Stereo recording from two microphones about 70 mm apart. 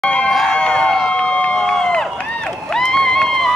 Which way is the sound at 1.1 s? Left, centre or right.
Centre.